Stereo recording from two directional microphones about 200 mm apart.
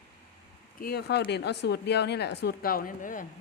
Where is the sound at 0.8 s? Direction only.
50° left (ahead or behind).